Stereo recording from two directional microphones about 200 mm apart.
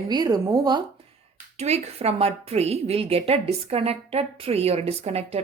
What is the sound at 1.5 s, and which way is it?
A woman's voice, 35° right (ahead or behind).